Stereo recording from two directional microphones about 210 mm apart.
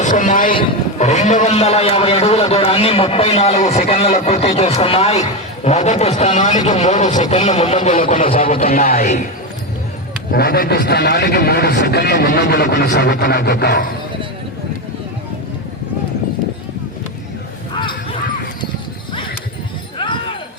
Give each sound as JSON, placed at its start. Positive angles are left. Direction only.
{"t": 0.0, "sound": "a man's voice", "side_deg": 35}
{"t": 10.3, "sound": "a man's voice", "side_deg": 45}